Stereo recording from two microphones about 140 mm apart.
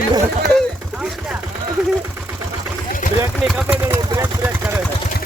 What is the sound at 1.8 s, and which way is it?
Vehicle, 5° right (ahead or behind).